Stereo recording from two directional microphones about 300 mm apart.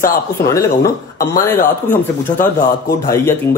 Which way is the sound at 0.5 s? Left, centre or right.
Centre.